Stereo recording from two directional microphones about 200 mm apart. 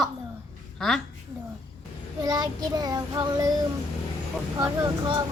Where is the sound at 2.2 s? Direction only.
20° right (ahead or behind).